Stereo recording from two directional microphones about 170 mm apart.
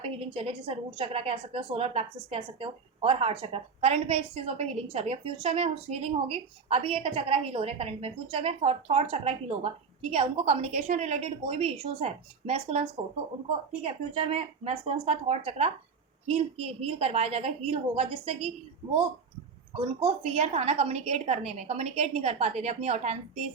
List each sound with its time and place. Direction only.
0.3 s a woman's voice: 35° right (ahead or behind)
19.7 s a woman's voice: 30° right (ahead or behind)